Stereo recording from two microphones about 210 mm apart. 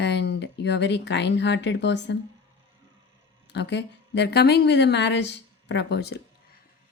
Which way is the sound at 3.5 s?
55° left (ahead or behind).